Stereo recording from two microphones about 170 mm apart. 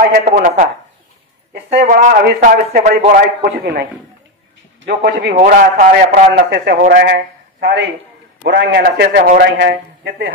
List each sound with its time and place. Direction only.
0.1 s speech: 60° right (ahead or behind)
1.5 s speech: 60° right (ahead or behind)
4.8 s a man's voice: 80° right
5.3 s a man's voice: 55° right (ahead or behind)
7.6 s a man's voice: 90° right